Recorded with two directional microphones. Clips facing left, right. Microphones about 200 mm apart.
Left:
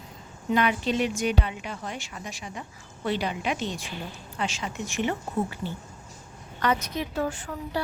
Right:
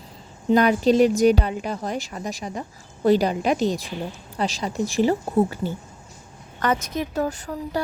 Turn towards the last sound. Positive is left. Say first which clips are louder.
# right 4 dB
turn(degrees=-40)  # may be behind; listen again after turning